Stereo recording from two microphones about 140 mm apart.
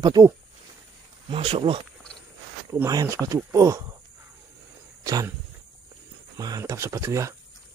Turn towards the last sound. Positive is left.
turn(degrees=-20)  # may be behind; listen again after turning